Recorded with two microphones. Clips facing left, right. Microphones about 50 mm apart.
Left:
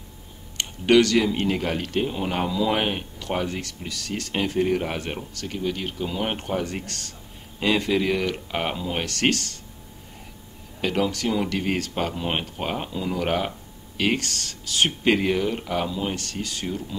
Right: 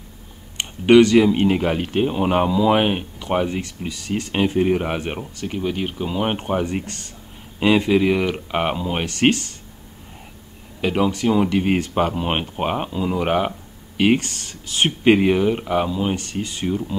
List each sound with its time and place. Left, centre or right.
0.6 s speech: right
3.2 s speech: right
10.8 s speech: centre
16.2 s speech: right